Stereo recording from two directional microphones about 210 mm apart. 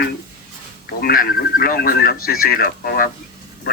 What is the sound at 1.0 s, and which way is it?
Speech, 45° left (ahead or behind).